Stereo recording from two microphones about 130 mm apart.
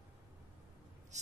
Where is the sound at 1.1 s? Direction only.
65° right (ahead or behind).